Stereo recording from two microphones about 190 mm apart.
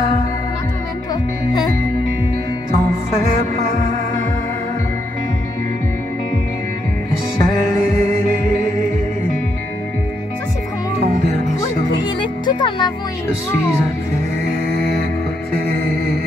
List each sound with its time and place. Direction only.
12.0 s music: 25° left (ahead or behind)